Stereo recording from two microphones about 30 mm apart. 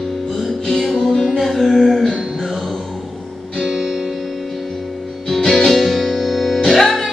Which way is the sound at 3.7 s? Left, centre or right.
Centre.